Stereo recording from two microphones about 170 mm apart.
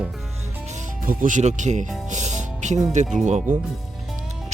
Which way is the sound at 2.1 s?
45° right (ahead or behind).